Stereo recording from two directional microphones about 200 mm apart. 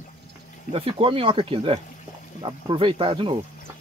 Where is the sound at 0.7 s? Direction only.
25° right (ahead or behind).